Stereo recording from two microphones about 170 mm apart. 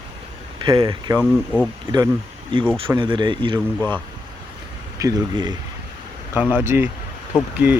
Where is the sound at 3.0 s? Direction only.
30° right (ahead or behind).